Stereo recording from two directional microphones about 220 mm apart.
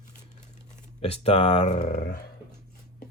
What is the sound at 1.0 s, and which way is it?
Speech, 25° left (ahead or behind).